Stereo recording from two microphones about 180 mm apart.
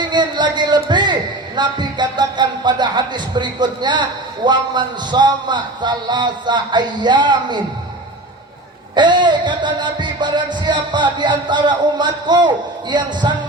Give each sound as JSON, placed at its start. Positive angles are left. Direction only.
{"t": 0.0, "sound": "a sound", "side_deg": -25}
{"t": 1.5, "sound": "music", "side_deg": -25}
{"t": 9.0, "sound": "music", "side_deg": -25}